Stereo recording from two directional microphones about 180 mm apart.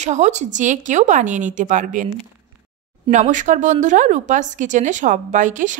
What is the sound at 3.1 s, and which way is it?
Speech, 45° right (ahead or behind).